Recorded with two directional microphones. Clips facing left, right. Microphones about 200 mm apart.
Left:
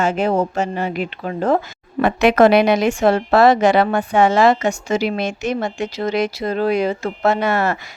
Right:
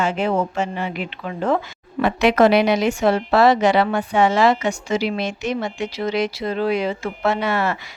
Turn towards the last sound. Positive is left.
turn(degrees=45)  # may be behind; listen again after turning